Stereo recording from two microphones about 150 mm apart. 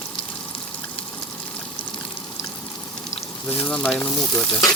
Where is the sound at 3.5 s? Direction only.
10° left (ahead or behind).